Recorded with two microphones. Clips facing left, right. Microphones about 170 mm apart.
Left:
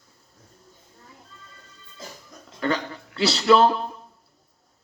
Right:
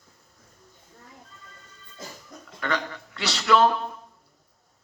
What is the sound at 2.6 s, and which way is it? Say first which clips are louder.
A man's voice: left 3 dB; 35° left (ahead or behind).